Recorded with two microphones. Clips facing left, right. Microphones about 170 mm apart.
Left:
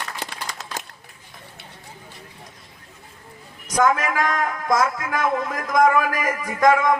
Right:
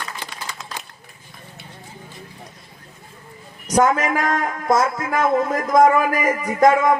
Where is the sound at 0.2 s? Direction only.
40° left (ahead or behind).